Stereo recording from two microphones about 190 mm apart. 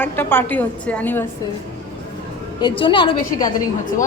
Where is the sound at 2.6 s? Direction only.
25° left (ahead or behind).